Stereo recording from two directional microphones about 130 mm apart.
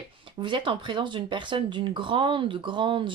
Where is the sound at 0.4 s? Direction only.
40° right (ahead or behind).